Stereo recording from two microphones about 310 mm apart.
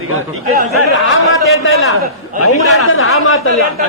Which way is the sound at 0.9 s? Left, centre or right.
Left.